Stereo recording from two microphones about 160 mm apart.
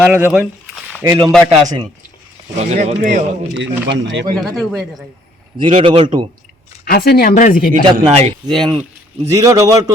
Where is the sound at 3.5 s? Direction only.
90° right.